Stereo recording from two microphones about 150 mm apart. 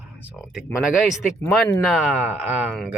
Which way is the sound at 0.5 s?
5° right (ahead or behind).